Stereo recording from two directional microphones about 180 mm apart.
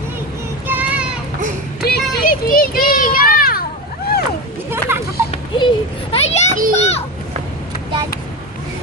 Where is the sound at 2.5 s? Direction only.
55° left (ahead or behind).